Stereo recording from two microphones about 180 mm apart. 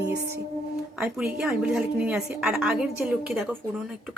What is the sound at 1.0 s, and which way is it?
A woman's voice, 5° right (ahead or behind).